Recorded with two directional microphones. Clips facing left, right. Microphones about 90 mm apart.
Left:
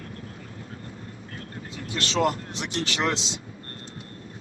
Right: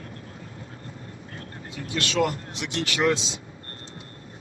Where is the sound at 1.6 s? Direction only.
30° left (ahead or behind).